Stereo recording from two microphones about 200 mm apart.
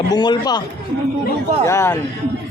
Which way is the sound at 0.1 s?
20° left (ahead or behind).